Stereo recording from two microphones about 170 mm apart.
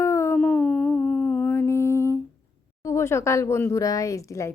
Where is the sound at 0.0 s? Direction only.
15° left (ahead or behind).